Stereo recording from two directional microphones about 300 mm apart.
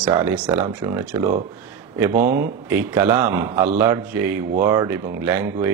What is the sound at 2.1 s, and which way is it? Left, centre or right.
Speech, right.